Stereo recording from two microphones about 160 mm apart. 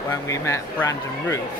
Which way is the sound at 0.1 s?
20° left (ahead or behind).